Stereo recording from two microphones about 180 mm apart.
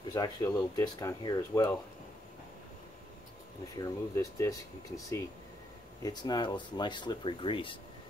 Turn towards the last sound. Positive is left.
turn(degrees=30)  # may be behind; listen again after turning